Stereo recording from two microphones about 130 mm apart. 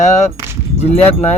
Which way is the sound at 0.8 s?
55° left (ahead or behind).